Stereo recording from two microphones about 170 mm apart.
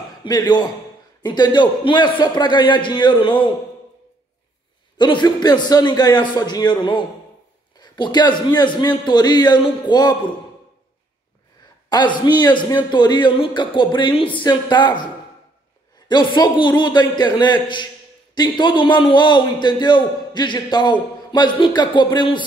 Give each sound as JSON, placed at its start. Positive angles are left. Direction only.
{"t": 0.2, "sound": "a man's voice", "side_deg": 25}
{"t": 4.9, "sound": "a man's voice", "side_deg": 25}
{"t": 11.9, "sound": "a man's voice", "side_deg": 25}
{"t": 16.1, "sound": "a man's voice", "side_deg": 25}